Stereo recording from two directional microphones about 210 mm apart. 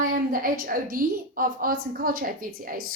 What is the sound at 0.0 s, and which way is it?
A woman's voice, 40° right (ahead or behind).